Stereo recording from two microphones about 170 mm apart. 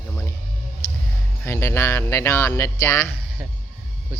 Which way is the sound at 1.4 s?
15° left (ahead or behind).